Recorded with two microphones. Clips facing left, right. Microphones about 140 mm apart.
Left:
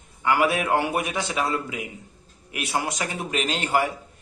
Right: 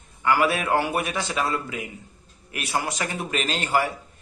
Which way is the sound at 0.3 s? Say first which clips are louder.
Left 1 dB; 15° left (ahead or behind).